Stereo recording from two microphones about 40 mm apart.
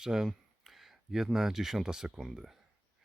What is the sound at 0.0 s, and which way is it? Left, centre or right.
Speech, centre.